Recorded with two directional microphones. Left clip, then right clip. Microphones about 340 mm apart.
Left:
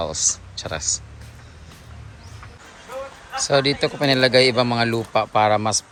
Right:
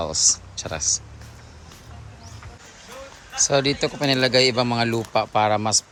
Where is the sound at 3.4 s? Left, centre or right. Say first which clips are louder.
Left 2 dB; centre.